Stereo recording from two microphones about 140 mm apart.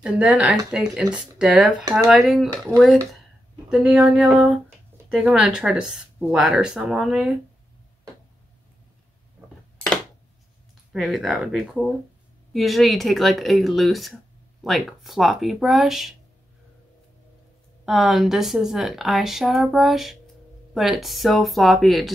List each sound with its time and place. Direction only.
0.0 s speech: 5° right (ahead or behind)
2.5 s speech: 25° right (ahead or behind)
3.6 s speech: 5° right (ahead or behind)
10.9 s speech: centre (ahead or behind)
17.8 s speech: centre (ahead or behind)